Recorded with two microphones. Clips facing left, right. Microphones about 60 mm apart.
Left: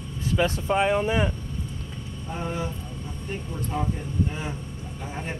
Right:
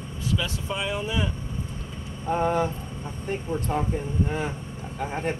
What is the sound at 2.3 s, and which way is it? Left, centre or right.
Speech, right.